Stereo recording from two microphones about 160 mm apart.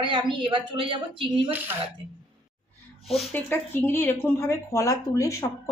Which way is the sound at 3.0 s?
Centre (ahead or behind).